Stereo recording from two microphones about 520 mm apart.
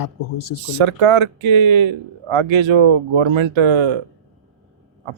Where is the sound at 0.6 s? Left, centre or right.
Right.